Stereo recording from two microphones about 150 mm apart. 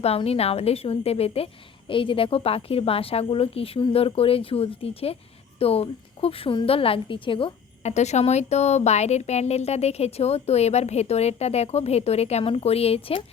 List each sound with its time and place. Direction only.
0.0 s speech: 40° left (ahead or behind)
7.8 s speech: 50° left (ahead or behind)